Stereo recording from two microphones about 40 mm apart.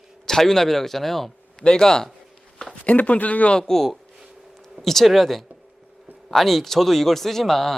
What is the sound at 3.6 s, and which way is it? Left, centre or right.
Speech, centre.